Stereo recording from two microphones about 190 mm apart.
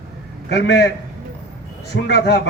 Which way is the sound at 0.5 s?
65° left (ahead or behind).